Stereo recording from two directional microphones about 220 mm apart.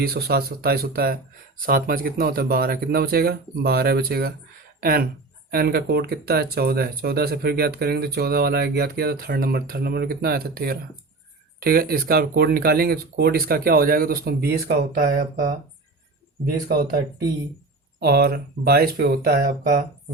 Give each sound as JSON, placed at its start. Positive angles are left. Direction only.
{"t": 0.0, "sound": "speech", "side_deg": -45}
{"t": 16.5, "sound": "speech", "side_deg": -45}
{"t": 18.0, "sound": "speech", "side_deg": -45}